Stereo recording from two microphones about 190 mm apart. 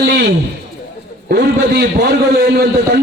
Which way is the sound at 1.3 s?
60° right (ahead or behind).